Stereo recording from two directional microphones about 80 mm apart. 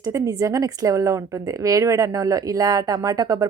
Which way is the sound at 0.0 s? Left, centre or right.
Right.